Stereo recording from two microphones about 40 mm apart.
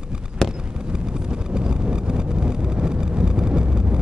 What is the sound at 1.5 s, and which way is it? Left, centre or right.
Vehicle, right.